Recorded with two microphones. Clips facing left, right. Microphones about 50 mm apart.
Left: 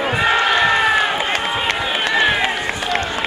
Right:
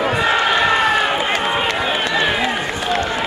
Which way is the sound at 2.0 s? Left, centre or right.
Left.